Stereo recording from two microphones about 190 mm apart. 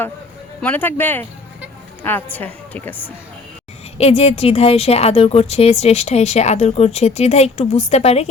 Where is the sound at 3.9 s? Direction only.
35° left (ahead or behind).